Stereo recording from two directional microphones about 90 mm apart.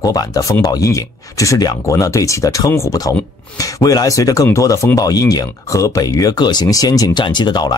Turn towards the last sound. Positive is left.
turn(degrees=50)  # may be behind; listen again after turning